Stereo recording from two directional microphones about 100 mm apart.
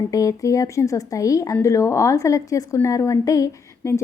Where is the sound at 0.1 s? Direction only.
35° left (ahead or behind).